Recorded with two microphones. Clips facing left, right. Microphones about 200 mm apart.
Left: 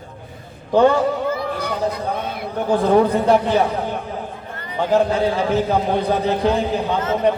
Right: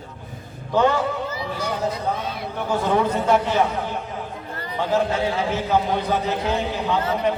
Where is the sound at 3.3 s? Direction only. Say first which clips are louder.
Even; 35° left (ahead or behind).